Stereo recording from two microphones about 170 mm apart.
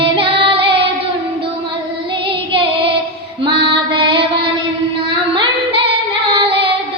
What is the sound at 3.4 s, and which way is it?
Female singing, 30° right (ahead or behind).